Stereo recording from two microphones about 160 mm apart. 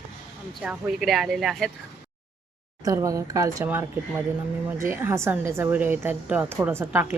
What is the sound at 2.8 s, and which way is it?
A woman's voice, 20° right (ahead or behind).